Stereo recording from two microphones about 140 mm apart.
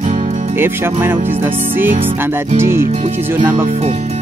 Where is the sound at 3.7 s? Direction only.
50° right (ahead or behind).